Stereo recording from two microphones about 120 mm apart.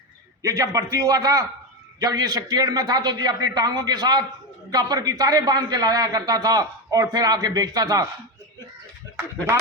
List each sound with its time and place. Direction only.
0.4 s a man's voice: 30° right (ahead or behind)